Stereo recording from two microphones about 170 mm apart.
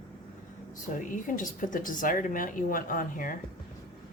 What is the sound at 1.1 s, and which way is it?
Speech, 50° left (ahead or behind).